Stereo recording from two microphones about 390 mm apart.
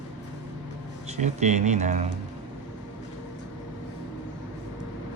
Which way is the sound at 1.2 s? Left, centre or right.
Centre.